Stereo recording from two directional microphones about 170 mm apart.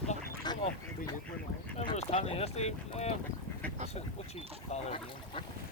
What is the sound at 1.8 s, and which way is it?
Speech, 35° left (ahead or behind).